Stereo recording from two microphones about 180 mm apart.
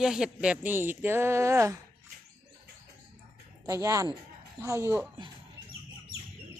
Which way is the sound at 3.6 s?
15° right (ahead or behind).